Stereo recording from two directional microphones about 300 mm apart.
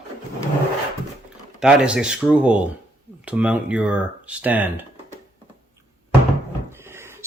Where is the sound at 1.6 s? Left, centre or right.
Centre.